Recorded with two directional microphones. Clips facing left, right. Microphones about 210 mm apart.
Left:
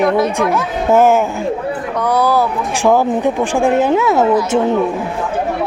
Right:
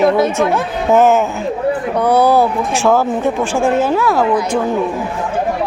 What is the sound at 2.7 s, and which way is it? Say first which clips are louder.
Speech: left 3 dB; 15° left (ahead or behind).